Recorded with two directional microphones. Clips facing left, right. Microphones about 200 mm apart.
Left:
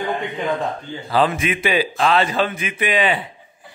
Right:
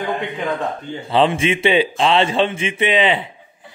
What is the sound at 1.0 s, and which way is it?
A man's voice, 25° right (ahead or behind).